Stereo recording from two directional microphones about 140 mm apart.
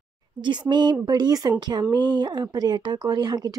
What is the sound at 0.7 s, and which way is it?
A woman's voice, 30° right (ahead or behind).